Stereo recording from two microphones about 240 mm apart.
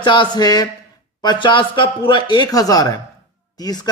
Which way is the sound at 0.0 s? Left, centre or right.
Centre.